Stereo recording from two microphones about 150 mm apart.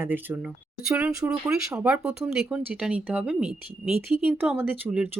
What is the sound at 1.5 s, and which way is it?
Speech, 5° right (ahead or behind).